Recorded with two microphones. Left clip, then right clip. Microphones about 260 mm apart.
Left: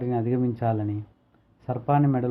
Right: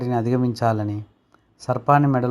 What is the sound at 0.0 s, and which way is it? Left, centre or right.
Speech, centre.